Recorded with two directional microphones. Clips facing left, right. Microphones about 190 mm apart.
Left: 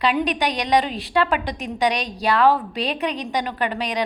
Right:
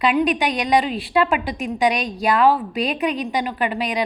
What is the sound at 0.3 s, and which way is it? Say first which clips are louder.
Speech: right 2 dB; 35° left (ahead or behind).